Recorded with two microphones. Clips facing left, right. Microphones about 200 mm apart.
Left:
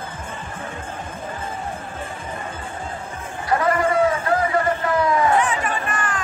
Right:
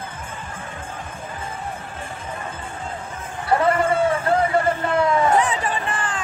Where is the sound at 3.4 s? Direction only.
30° right (ahead or behind).